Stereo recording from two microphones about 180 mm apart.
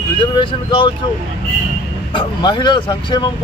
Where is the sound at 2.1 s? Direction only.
25° left (ahead or behind).